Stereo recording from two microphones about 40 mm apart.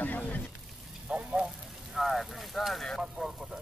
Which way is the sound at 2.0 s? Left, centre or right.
Centre.